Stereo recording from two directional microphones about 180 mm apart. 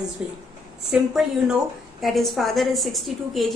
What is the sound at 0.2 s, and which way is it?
A woman's voice, 5° right (ahead or behind).